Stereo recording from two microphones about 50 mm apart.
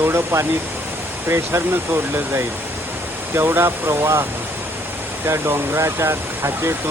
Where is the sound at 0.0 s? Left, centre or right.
Right.